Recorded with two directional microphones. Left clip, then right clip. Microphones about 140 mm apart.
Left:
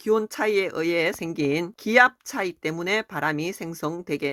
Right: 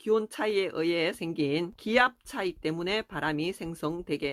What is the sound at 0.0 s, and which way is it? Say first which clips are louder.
Speech: left 5 dB; 40° left (ahead or behind).